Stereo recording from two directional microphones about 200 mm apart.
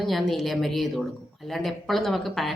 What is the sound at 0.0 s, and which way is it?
A woman's voice, centre (ahead or behind).